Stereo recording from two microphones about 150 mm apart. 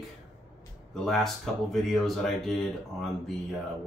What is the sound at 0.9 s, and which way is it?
Speech, centre (ahead or behind).